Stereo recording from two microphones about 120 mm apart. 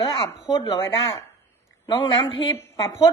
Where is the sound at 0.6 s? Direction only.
30° left (ahead or behind).